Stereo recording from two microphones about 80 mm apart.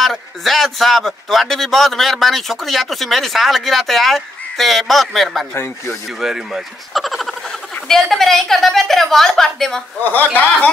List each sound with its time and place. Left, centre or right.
0.0 s speech: centre
5.5 s speech: left
6.2 s speech: centre
10.0 s speech: left